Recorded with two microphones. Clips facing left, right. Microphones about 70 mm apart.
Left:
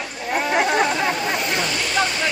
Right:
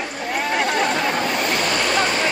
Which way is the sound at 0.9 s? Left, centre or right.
Right.